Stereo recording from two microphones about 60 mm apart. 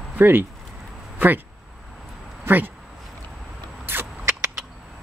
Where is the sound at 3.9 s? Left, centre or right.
Right.